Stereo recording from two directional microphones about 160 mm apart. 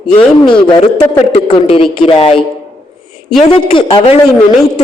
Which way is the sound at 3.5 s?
35° left (ahead or behind).